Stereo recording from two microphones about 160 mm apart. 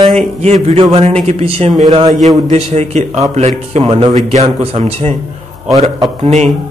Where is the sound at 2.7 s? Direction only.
40° right (ahead or behind).